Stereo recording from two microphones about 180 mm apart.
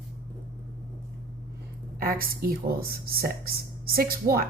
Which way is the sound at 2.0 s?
55° right (ahead or behind).